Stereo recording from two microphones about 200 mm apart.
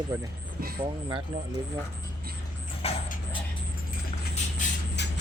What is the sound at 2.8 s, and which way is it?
Dog, 30° left (ahead or behind).